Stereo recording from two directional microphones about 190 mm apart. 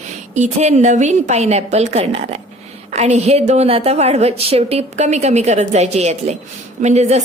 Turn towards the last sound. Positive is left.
turn(degrees=-35)  # may be behind; listen again after turning